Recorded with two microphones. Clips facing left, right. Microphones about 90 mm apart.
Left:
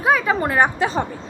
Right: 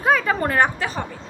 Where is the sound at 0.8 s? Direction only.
25° left (ahead or behind).